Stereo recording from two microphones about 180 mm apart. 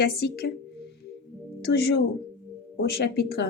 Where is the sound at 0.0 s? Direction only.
60° left (ahead or behind).